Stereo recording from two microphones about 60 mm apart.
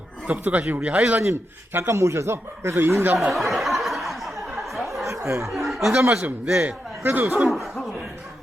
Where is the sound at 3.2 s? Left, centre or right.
Centre.